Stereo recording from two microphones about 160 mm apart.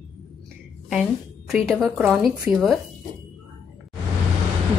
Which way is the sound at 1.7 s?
Centre (ahead or behind).